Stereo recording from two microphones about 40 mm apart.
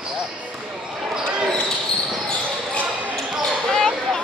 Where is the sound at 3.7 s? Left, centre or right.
Centre.